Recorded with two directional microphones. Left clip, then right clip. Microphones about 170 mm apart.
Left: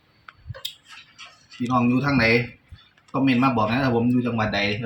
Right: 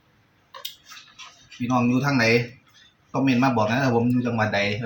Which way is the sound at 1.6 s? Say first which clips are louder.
Left 1 dB; 20° right (ahead or behind).